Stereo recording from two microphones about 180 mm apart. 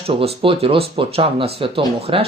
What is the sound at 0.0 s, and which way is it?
Speech, 35° right (ahead or behind).